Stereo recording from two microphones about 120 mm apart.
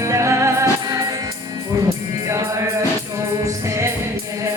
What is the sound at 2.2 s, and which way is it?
Music, 25° right (ahead or behind).